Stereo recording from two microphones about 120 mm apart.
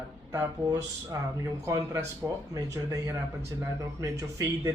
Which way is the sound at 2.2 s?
15° right (ahead or behind).